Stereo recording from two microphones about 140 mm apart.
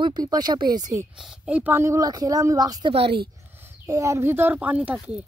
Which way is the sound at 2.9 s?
45° right (ahead or behind).